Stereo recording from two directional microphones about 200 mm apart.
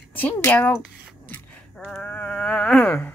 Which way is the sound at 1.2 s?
10° left (ahead or behind).